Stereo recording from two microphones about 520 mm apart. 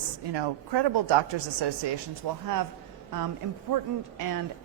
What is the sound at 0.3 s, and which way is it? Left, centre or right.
Speech, right.